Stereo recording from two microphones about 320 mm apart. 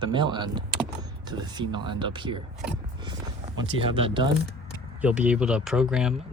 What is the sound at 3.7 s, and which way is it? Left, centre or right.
Speech, centre.